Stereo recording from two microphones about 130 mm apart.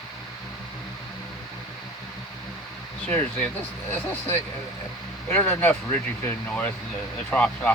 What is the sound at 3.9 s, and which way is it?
Speech, 15° left (ahead or behind).